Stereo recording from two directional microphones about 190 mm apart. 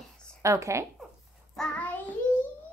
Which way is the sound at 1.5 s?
5° left (ahead or behind).